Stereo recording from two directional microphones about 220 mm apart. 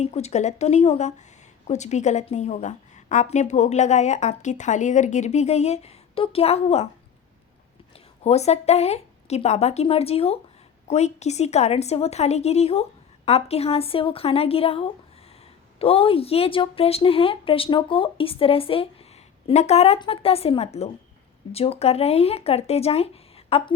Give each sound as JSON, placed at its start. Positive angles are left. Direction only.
{"t": 0.0, "sound": "a woman's voice", "side_deg": 30}
{"t": 7.9, "sound": "a woman's voice", "side_deg": 30}